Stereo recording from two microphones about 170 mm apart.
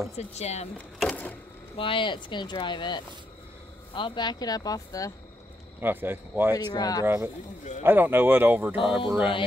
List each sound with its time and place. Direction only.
0.2 s speech: 40° left (ahead or behind)
0.9 s a sound: 5° left (ahead or behind)
1.8 s speech: 30° left (ahead or behind)
5.8 s speech: 10° right (ahead or behind)
6.5 s speech: 20° left (ahead or behind)
7.8 s speech: 10° right (ahead or behind)
8.8 s mantra: centre (ahead or behind)